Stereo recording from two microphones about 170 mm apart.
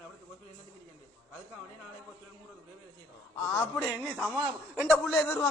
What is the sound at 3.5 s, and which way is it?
A man's voice, 10° left (ahead or behind).